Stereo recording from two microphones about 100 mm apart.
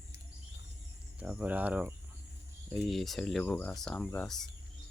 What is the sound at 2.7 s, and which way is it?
Speech, centre (ahead or behind).